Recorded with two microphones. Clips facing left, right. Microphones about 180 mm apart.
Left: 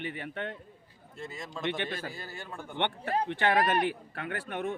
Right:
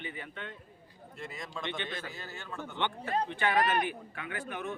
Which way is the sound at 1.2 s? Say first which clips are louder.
Left 1 dB; centre (ahead or behind).